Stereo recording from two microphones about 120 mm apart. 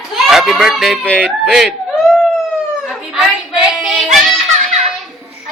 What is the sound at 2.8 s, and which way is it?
Child singing, 5° right (ahead or behind).